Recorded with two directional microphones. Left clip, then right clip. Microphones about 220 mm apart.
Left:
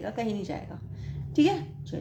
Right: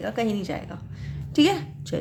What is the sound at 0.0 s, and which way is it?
A woman's voice, 25° right (ahead or behind).